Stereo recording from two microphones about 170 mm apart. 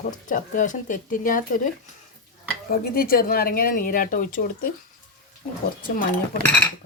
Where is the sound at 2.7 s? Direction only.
60° left (ahead or behind).